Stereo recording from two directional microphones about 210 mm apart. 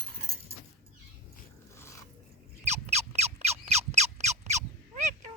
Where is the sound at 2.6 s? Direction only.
30° right (ahead or behind).